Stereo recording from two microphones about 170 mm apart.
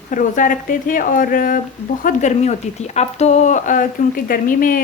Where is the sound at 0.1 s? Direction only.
50° left (ahead or behind).